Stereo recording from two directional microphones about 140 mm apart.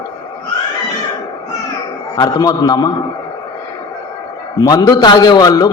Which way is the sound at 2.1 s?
25° left (ahead or behind).